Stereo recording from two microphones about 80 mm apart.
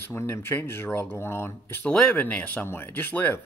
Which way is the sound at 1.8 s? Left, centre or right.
Left.